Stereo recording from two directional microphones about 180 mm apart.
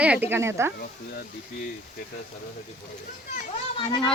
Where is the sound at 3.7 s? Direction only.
30° left (ahead or behind).